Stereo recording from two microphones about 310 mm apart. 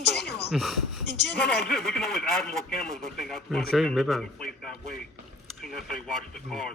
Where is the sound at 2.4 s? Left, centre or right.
Left.